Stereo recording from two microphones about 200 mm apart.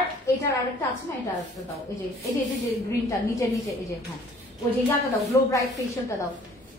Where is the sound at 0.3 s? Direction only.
15° left (ahead or behind).